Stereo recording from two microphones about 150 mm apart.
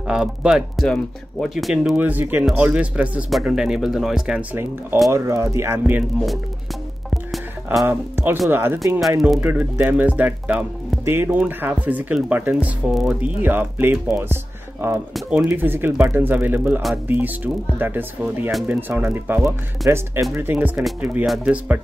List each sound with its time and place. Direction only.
0.0 s speech: 5° right (ahead or behind)
5.1 s speech: 20° right (ahead or behind)
7.1 s music: centre (ahead or behind)
7.8 s speech: 15° right (ahead or behind); by 13.3 s centre (ahead or behind)
13.4 s speech: 15° right (ahead or behind)
19.8 s speech: centre (ahead or behind)
20.3 s speech: 15° right (ahead or behind)